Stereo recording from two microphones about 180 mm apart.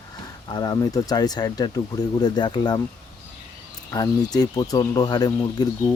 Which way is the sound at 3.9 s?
20° left (ahead or behind).